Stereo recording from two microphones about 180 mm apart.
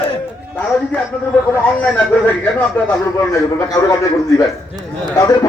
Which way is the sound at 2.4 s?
5° left (ahead or behind).